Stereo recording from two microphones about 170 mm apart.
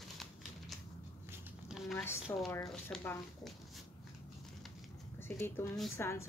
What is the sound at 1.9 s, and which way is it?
Speech, 15° left (ahead or behind).